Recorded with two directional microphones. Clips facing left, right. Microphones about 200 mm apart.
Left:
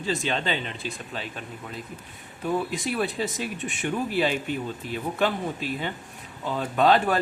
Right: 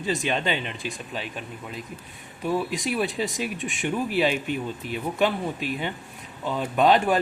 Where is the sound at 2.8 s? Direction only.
15° right (ahead or behind).